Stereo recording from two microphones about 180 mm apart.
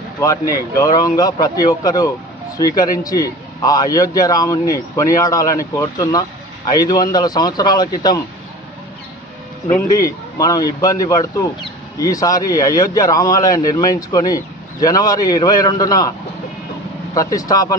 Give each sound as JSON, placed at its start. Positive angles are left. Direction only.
{"t": 0.2, "sound": "a man's voice", "side_deg": 15}
{"t": 9.7, "sound": "a man's voice", "side_deg": 15}
{"t": 17.1, "sound": "a man's voice", "side_deg": 20}